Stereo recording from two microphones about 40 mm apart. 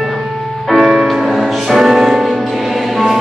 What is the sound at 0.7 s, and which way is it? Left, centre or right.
Music, centre.